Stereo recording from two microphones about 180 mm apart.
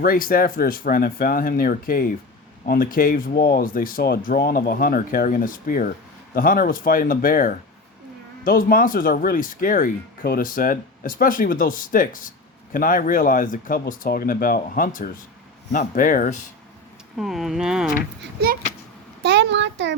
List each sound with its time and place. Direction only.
0.0 s speech: 55° left (ahead or behind)
17.2 s speech: centre (ahead or behind)
18.2 s a child's voice: 60° right (ahead or behind)
19.2 s a sound: 75° right (ahead or behind)